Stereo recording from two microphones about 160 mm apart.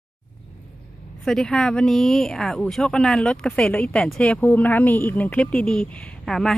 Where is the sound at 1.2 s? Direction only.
5° left (ahead or behind).